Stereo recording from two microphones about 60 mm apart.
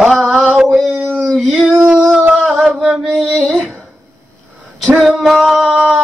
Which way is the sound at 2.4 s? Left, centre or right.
Centre.